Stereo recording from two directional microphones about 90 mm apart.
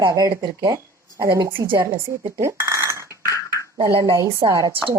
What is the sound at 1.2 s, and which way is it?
A woman's voice, 30° right (ahead or behind).